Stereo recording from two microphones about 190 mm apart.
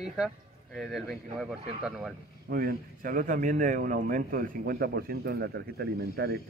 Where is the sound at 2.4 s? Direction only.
50° right (ahead or behind).